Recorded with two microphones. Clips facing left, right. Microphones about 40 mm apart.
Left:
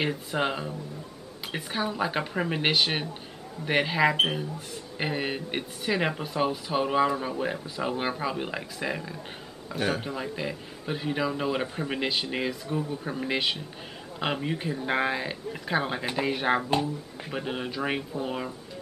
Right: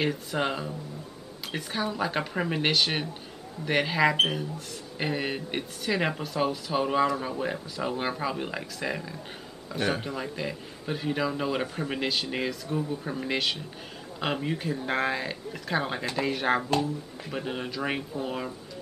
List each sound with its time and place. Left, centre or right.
0.0 s speech: centre
16.7 s speech: left
17.3 s speech: centre